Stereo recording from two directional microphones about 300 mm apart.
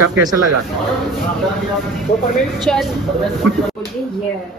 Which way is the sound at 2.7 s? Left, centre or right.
Centre.